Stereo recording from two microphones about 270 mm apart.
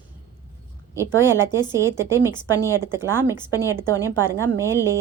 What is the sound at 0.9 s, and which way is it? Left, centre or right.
A woman's voice, centre.